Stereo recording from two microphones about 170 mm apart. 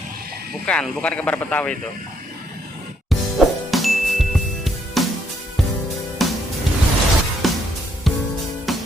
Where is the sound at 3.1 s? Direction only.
Centre (ahead or behind).